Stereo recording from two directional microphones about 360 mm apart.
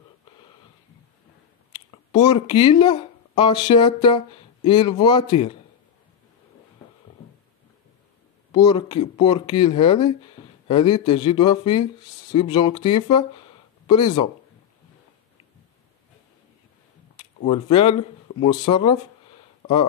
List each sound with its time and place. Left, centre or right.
2.1 s speech: centre
8.5 s speech: centre
17.2 s speech: centre